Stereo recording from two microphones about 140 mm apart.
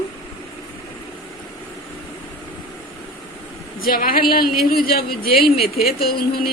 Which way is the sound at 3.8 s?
90° left.